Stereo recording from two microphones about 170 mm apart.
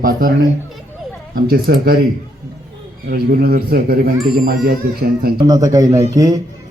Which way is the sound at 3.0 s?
60° right (ahead or behind).